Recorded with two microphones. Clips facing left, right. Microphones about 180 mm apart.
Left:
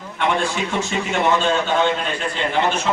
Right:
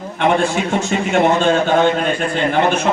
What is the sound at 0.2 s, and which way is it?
A man's voice, 45° right (ahead or behind).